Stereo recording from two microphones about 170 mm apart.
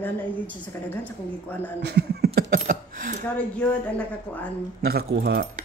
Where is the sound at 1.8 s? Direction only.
80° right.